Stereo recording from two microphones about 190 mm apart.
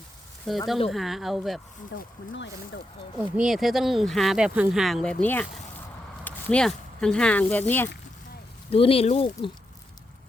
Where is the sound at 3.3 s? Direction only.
5° right (ahead or behind).